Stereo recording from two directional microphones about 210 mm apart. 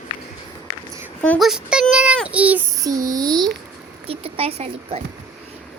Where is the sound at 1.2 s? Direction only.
5° left (ahead or behind).